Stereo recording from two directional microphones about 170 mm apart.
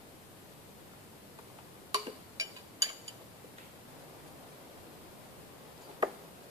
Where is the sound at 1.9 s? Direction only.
20° right (ahead or behind).